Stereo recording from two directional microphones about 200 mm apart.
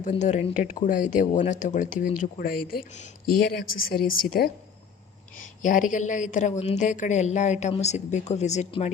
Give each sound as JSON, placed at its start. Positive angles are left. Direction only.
{"t": 0.0, "sound": "a woman's voice", "side_deg": 35}
{"t": 5.6, "sound": "a woman's voice", "side_deg": 40}